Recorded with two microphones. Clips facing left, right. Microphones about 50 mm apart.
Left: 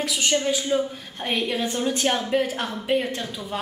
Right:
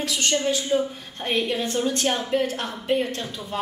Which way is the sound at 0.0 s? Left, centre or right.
Centre.